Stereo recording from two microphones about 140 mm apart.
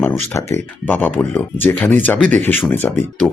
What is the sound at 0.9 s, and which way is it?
Speech, 15° left (ahead or behind).